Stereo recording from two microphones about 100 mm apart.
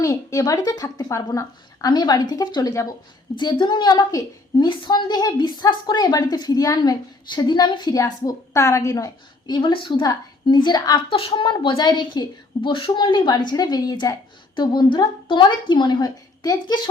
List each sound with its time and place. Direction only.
0.0 s a woman's voice: 35° left (ahead or behind)
3.3 s a woman's voice: 50° left (ahead or behind)
9.6 s a woman's voice: 55° left (ahead or behind)
11.1 s a woman's voice: 60° left (ahead or behind); by 16.9 s 45° left (ahead or behind)